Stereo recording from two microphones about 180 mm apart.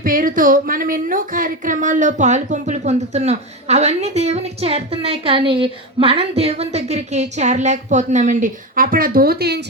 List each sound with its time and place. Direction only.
0.0 s a woman's voice: 50° right (ahead or behind)